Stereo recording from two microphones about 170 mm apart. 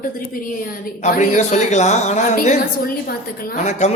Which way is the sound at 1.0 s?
45° left (ahead or behind).